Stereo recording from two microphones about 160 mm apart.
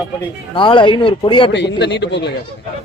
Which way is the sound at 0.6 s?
30° left (ahead or behind).